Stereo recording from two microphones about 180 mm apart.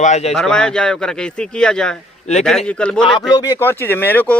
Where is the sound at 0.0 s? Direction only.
40° left (ahead or behind).